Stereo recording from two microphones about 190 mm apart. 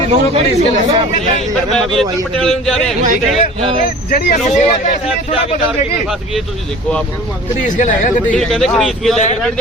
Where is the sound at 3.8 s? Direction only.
50° left (ahead or behind).